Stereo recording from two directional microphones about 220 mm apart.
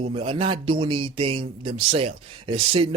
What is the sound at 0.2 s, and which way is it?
Speech, 25° right (ahead or behind).